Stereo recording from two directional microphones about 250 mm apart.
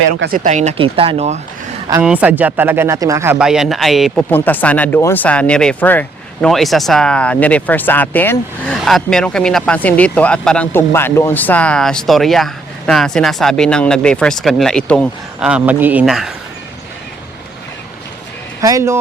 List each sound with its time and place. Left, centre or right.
0.2 s speech: right
1.9 s speech: centre
18.6 s speech: centre